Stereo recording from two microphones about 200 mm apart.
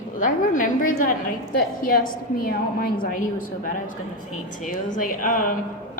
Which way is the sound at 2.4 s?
45° left (ahead or behind).